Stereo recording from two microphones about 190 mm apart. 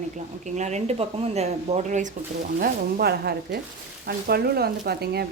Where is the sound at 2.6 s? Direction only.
55° right (ahead or behind).